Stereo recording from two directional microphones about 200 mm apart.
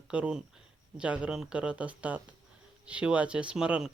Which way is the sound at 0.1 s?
5° right (ahead or behind).